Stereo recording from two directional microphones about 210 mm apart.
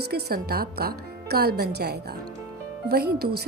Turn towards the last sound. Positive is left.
turn(degrees=-50)  # may be behind; listen again after turning